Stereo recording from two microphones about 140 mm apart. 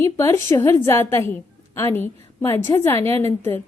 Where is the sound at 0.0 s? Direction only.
20° left (ahead or behind).